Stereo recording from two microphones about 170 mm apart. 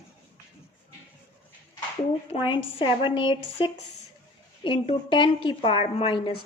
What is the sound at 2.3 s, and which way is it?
A woman's voice, 25° left (ahead or behind).